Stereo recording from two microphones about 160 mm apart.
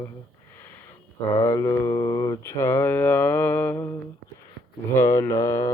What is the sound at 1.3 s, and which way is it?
Mantra, 20° left (ahead or behind).